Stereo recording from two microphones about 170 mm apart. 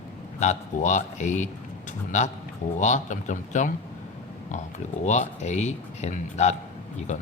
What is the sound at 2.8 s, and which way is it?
Speech, 45° left (ahead or behind).